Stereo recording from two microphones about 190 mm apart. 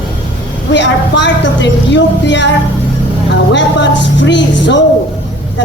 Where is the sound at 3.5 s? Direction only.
70° left (ahead or behind).